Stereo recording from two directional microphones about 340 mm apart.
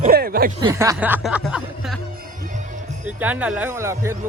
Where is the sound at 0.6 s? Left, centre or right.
Centre.